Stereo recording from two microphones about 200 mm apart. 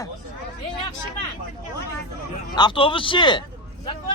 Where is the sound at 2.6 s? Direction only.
25° left (ahead or behind).